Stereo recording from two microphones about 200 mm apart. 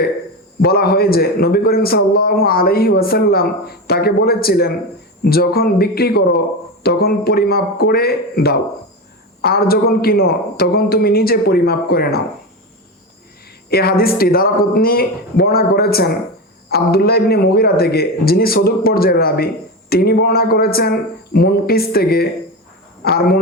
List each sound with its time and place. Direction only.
0.6 s a man's voice: 50° left (ahead or behind)
13.7 s a man's voice: 50° left (ahead or behind)